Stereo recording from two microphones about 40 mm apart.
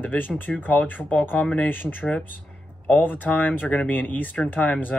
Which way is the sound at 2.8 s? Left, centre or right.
Left.